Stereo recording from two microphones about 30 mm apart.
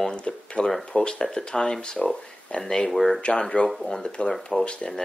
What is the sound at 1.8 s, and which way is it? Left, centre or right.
Speech, left.